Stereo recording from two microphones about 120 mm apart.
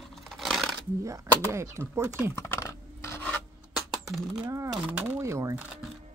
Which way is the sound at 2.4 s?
25° left (ahead or behind).